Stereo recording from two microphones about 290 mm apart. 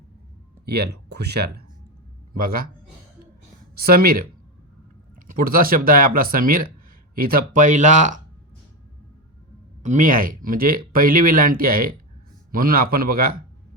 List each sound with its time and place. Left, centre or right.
0.6 s speech: right
3.8 s speech: right
5.3 s speech: right
9.8 s speech: right